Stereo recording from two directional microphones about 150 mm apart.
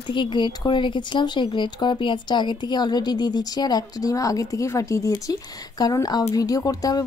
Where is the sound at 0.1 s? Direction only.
30° left (ahead or behind).